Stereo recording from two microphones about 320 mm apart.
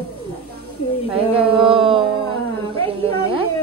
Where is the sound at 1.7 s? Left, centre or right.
Centre.